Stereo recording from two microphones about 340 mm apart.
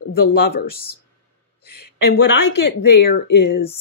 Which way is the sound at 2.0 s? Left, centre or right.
Left.